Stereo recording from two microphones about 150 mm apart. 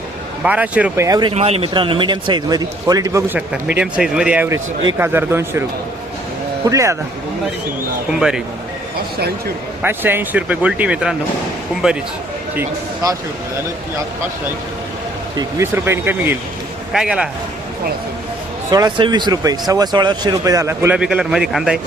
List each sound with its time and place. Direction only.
0.4 s speech: 10° right (ahead or behind)
1.0 s speech: 25° right (ahead or behind)
1.3 s a man's voice: 45° right (ahead or behind); by 3.3 s 20° right (ahead or behind)
3.3 s speech: 5° right (ahead or behind)
6.7 s speech: 20° right (ahead or behind)
9.8 s a man's voice: 15° right (ahead or behind)
15.4 s a man's voice: 20° right (ahead or behind)
18.7 s speech: 30° right (ahead or behind); by 21.8 s 5° right (ahead or behind)